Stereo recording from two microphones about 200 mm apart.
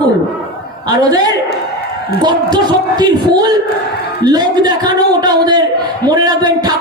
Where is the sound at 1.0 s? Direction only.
20° right (ahead or behind).